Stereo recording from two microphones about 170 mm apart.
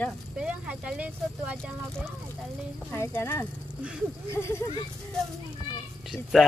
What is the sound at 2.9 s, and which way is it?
Speech, 15° left (ahead or behind).